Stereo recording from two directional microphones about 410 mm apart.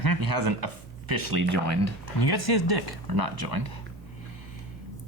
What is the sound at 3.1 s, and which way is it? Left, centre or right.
Speech, right.